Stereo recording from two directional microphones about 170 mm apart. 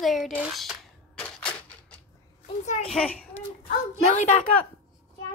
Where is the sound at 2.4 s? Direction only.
45° left (ahead or behind).